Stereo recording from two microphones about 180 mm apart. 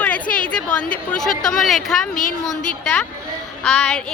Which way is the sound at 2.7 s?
5° left (ahead or behind).